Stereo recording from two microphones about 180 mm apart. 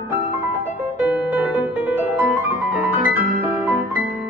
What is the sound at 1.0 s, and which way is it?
Music, 5° right (ahead or behind).